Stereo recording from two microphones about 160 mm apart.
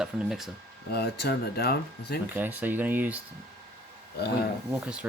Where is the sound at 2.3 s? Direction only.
10° right (ahead or behind).